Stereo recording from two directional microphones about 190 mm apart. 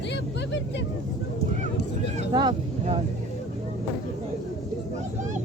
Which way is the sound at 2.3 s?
25° right (ahead or behind).